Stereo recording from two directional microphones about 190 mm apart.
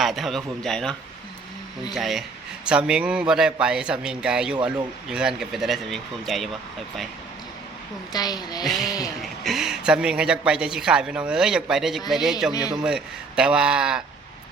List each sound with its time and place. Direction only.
0.0 s speech: centre (ahead or behind)
8.1 s a woman's voice: 20° left (ahead or behind)
9.4 s speech: centre (ahead or behind)